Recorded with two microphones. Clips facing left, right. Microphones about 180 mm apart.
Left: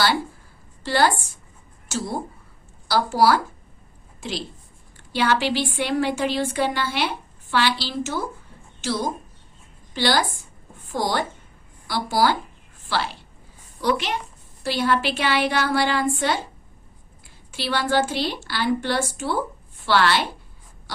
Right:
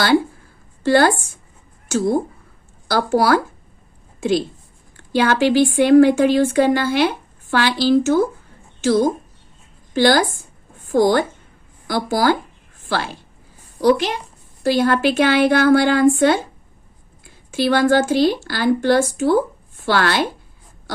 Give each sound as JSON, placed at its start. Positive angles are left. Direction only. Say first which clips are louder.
{"t": 0.8, "sound": "a woman's voice", "louder": "right 6 dB", "side_deg": -50}
{"t": 14.6, "sound": "speech", "louder": "right 6 dB", "side_deg": -45}
{"t": 17.5, "sound": "speech", "louder": "right 8 dB", "side_deg": -50}